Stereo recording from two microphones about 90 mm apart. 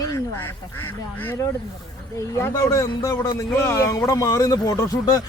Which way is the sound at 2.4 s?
35° left (ahead or behind).